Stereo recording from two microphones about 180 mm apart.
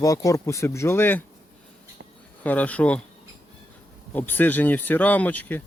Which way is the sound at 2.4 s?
10° left (ahead or behind).